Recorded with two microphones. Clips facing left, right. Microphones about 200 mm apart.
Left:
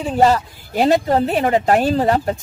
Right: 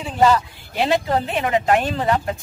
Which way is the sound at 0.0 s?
40° left (ahead or behind).